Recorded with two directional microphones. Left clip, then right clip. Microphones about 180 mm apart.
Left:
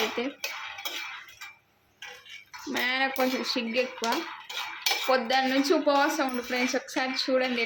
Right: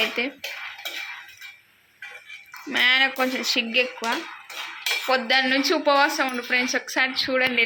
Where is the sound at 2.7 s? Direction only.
5° left (ahead or behind).